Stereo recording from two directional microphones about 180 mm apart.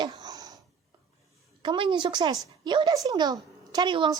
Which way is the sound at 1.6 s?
25° right (ahead or behind).